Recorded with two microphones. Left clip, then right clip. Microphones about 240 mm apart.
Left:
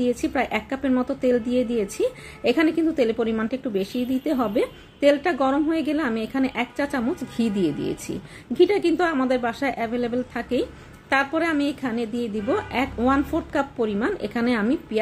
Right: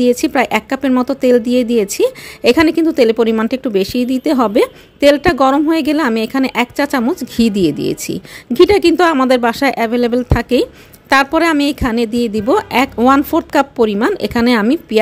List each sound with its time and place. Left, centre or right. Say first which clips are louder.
0.0 s a woman's voice: right 11 dB; right